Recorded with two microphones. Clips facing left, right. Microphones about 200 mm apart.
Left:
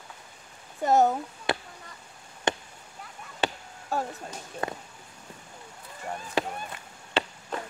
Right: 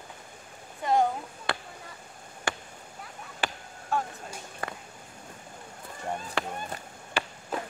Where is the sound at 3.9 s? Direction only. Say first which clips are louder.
Even; 40° left (ahead or behind).